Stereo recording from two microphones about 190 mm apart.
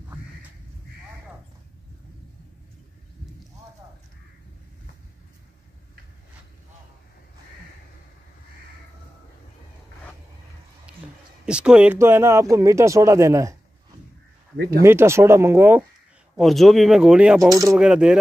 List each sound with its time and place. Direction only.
10.9 s a sound: 5° right (ahead or behind)
11.4 s speech: 5° right (ahead or behind)
14.8 s speech: 15° right (ahead or behind)
16.3 s speech: centre (ahead or behind)
17.4 s speech: 15° right (ahead or behind)
17.7 s speech: 5° right (ahead or behind)